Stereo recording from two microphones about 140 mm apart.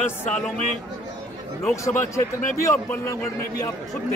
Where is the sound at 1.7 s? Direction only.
20° left (ahead or behind).